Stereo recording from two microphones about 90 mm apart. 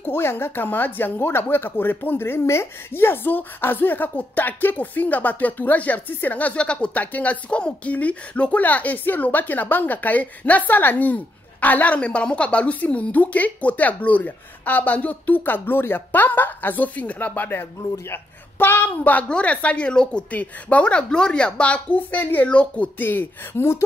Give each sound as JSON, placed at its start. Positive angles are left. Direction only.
{"t": 0.0, "sound": "a woman's voice", "side_deg": 25}